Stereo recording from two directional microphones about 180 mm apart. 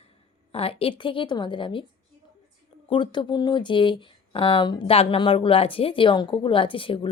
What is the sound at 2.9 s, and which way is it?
Speech, 25° left (ahead or behind).